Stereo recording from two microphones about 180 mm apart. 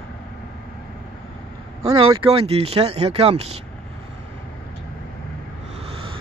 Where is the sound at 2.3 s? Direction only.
35° right (ahead or behind).